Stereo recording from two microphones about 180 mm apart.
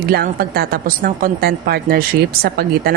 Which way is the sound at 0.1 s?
60° right (ahead or behind).